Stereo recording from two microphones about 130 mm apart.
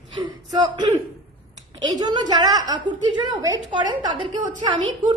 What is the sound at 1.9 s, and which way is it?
A woman's voice, 30° right (ahead or behind).